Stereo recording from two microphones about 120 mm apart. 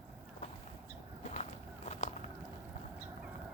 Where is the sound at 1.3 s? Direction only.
65° left (ahead or behind).